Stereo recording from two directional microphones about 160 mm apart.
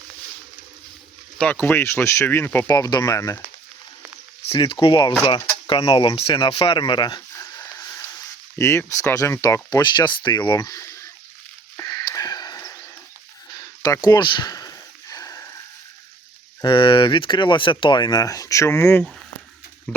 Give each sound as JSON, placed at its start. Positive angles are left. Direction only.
{"t": 1.4, "sound": "speech", "side_deg": 10}
{"t": 4.4, "sound": "speech", "side_deg": 35}
{"t": 11.8, "sound": "a sound", "side_deg": 20}
{"t": 16.6, "sound": "speech", "side_deg": 30}